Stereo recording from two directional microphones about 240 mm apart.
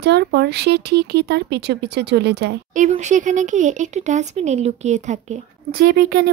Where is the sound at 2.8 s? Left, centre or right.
Right.